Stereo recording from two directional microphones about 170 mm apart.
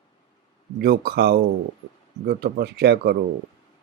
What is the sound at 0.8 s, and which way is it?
Speech, 65° right (ahead or behind).